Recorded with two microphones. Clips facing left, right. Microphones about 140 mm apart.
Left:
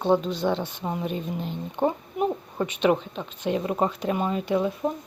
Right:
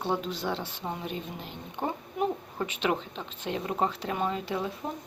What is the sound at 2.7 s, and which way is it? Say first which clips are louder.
Speech: left 8 dB; 15° left (ahead or behind).